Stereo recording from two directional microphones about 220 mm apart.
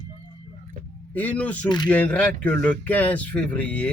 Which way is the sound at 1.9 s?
5° left (ahead or behind).